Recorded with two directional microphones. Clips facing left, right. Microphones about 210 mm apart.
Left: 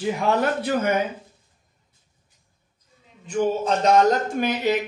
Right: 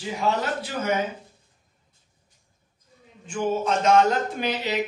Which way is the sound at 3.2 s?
35° left (ahead or behind).